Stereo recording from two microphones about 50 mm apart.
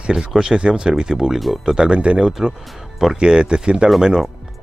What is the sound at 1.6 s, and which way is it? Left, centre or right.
Speech, centre.